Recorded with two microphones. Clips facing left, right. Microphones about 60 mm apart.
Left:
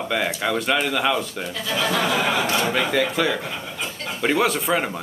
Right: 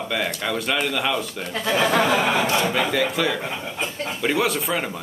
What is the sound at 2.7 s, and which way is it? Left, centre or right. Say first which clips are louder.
Speech: left 1 dB; centre.